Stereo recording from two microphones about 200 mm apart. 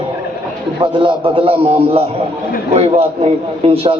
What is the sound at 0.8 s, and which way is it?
A man's voice, 25° right (ahead or behind).